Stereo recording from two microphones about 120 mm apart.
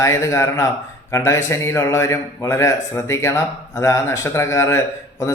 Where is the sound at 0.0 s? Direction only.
25° left (ahead or behind).